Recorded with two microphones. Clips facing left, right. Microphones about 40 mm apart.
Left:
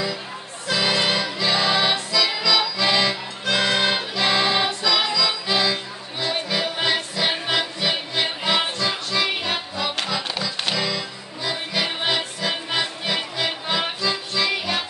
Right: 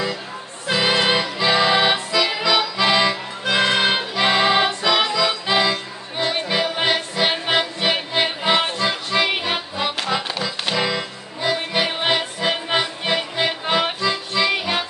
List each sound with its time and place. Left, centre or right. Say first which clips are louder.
0.7 s music: right 3 dB; right
1.4 s accordion: right 4 dB; right
6.9 s music: right 3 dB; centre
7.4 s music: right 3 dB; right